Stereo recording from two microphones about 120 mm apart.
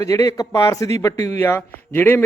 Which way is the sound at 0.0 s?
30° left (ahead or behind).